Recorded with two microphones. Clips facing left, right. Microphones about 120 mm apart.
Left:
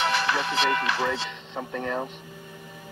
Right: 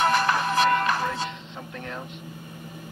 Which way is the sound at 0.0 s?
45° right (ahead or behind).